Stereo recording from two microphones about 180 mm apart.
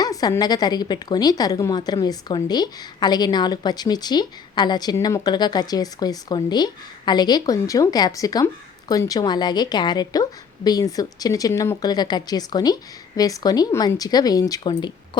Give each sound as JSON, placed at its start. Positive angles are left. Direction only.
{"t": 0.0, "sound": "a woman's voice", "side_deg": 20}